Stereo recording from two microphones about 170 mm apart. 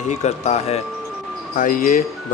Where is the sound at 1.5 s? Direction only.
55° left (ahead or behind).